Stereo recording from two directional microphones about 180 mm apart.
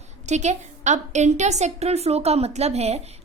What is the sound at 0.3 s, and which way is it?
A woman's voice, 40° right (ahead or behind).